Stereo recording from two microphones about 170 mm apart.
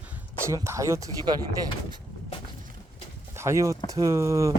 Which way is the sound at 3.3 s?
15° right (ahead or behind).